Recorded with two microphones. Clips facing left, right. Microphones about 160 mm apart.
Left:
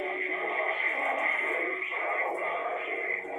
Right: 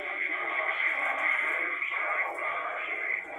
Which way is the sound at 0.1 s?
20° left (ahead or behind).